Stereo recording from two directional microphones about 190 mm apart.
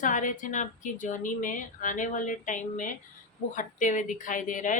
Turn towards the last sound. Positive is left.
turn(degrees=45)  # may be behind; listen again after turning